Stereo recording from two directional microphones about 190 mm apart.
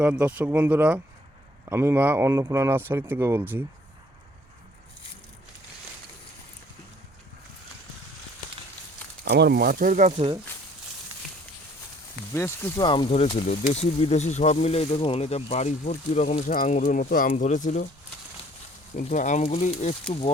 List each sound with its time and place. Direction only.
0.0 s speech: 5° right (ahead or behind)
9.2 s speech: 60° right (ahead or behind); by 10.2 s 45° right (ahead or behind)
12.3 s speech: 15° left (ahead or behind); by 17.8 s 40° left (ahead or behind)
18.9 s speech: 40° left (ahead or behind)